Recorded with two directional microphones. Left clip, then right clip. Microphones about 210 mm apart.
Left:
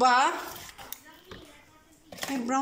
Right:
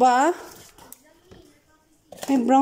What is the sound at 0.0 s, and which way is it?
Speech, 35° right (ahead or behind).